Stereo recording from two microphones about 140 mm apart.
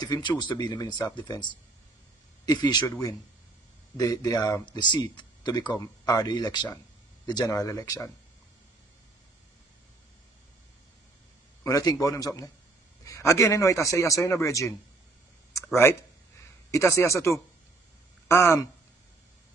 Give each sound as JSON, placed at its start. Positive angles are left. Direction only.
{"t": 0.0, "sound": "speech", "side_deg": 30}
{"t": 11.6, "sound": "speech", "side_deg": 25}